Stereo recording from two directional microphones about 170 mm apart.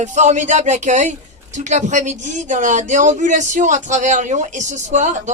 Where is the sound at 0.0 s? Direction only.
45° right (ahead or behind).